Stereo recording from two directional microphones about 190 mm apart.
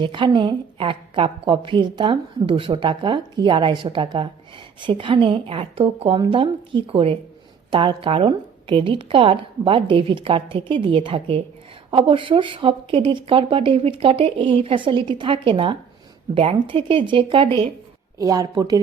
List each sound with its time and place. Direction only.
0.0 s a woman's voice: 25° right (ahead or behind)